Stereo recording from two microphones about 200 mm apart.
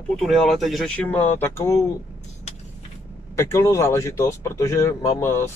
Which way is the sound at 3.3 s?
15° left (ahead or behind).